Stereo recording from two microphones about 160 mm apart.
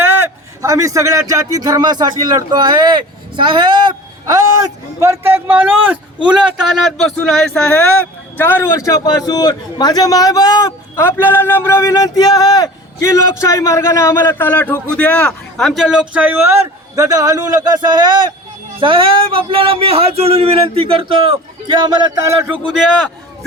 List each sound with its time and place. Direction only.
0.0 s a man's voice: 15° right (ahead or behind)